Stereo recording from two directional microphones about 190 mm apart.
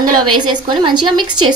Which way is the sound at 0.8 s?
25° right (ahead or behind).